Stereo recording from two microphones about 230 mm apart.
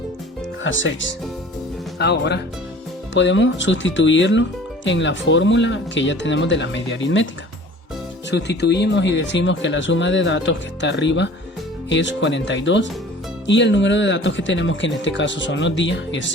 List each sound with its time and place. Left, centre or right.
0.6 s speech: left
8.3 s speech: left